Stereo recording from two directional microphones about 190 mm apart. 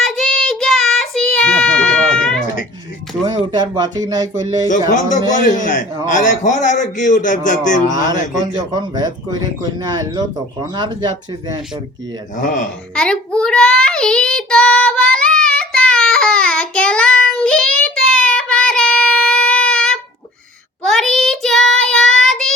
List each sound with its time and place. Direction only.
0.0 s child singing: centre (ahead or behind)
3.2 s speech: 20° right (ahead or behind)
4.9 s a man's voice: 40° left (ahead or behind)
8.4 s speech: 20° right (ahead or behind)
12.4 s a man's voice: 45° left (ahead or behind)
12.9 s child singing: 5° left (ahead or behind)